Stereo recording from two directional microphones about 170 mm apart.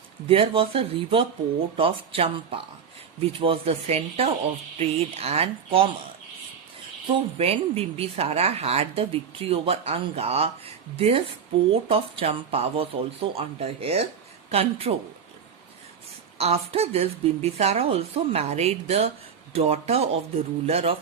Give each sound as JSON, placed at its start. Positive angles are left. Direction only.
{"t": 0.3, "sound": "speech", "side_deg": -30}
{"t": 7.1, "sound": "speech", "side_deg": -35}
{"t": 16.4, "sound": "speech", "side_deg": -35}